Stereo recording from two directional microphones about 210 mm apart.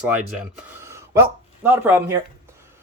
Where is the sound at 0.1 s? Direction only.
5° right (ahead or behind).